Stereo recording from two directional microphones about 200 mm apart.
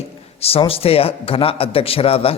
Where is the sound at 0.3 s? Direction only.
30° left (ahead or behind).